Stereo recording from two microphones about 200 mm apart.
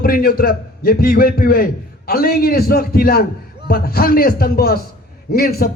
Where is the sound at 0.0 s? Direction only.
50° left (ahead or behind).